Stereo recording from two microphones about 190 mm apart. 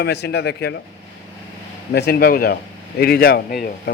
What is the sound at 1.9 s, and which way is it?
Speech, 60° left (ahead or behind).